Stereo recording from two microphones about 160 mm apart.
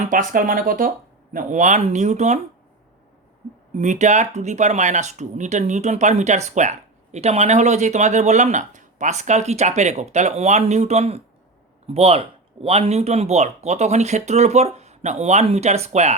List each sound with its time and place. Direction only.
0.0 s speech: 55° right (ahead or behind)
3.8 s speech: 50° right (ahead or behind)